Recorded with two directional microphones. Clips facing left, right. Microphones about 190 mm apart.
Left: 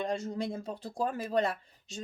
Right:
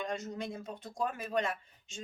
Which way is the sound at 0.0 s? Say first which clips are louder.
Left 4 dB; 30° left (ahead or behind).